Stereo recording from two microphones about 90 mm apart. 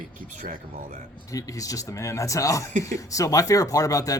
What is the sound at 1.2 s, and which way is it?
Speech, 40° left (ahead or behind).